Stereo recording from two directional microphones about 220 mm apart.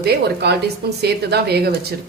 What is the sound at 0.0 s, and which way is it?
Speech, 45° right (ahead or behind).